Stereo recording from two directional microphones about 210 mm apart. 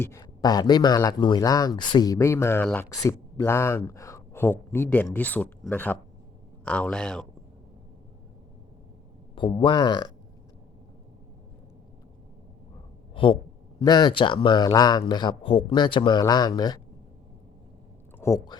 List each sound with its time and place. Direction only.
0.0 s speech: 15° left (ahead or behind)
9.3 s speech: 25° left (ahead or behind)
13.7 s speech: 20° left (ahead or behind)
18.2 s speech: 15° left (ahead or behind)